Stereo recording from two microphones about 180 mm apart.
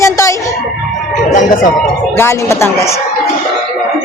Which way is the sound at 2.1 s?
15° left (ahead or behind).